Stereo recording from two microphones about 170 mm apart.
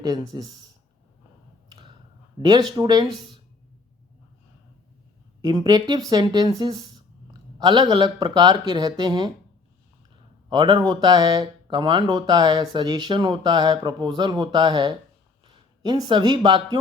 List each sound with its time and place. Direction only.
0.0 s speech: 20° right (ahead or behind)
2.4 s speech: 25° right (ahead or behind)
5.4 s speech: 25° right (ahead or behind)
10.5 s speech: 25° right (ahead or behind)